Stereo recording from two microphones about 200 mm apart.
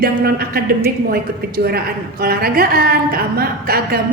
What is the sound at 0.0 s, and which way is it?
A woman's voice, 50° right (ahead or behind).